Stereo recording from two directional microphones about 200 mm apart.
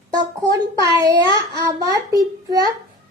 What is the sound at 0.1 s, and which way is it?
Speech, 20° right (ahead or behind).